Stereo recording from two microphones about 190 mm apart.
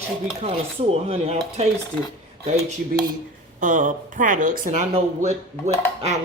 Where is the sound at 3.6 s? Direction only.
40° right (ahead or behind).